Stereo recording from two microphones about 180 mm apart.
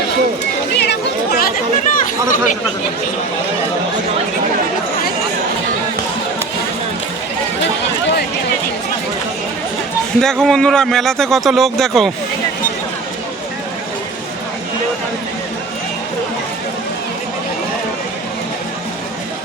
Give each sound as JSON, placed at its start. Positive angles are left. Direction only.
{"t": 0.8, "sound": "chatter", "side_deg": 65}
{"t": 10.2, "sound": "speech", "side_deg": 5}